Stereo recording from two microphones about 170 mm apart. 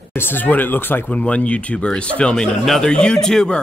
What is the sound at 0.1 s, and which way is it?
A man's voice, 10° left (ahead or behind).